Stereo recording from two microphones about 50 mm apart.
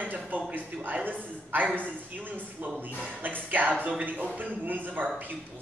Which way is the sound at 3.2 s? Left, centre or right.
Right.